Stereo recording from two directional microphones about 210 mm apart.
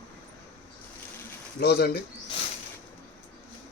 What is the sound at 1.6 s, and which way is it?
Speech, 50° left (ahead or behind).